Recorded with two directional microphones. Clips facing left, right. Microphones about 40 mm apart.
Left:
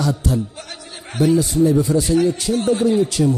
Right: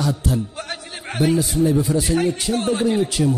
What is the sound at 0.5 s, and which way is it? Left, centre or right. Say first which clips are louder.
Music: right 4 dB; right.